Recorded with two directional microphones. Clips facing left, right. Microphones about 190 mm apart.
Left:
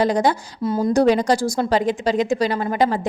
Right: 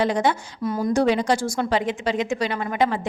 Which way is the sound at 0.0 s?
40° left (ahead or behind).